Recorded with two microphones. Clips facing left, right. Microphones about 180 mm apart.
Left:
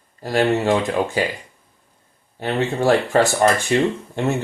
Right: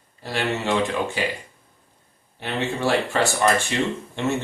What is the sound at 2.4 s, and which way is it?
Speech, 45° left (ahead or behind).